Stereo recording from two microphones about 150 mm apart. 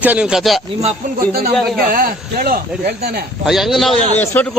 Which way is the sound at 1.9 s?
70° right (ahead or behind).